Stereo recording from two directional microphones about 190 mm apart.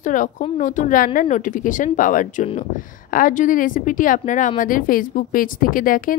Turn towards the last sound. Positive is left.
turn(degrees=45)  # may be behind; listen again after turning